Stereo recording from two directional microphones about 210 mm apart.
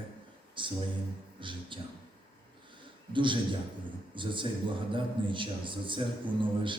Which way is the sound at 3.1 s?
25° right (ahead or behind).